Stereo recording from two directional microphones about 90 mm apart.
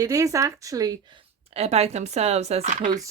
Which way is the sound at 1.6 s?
90° right.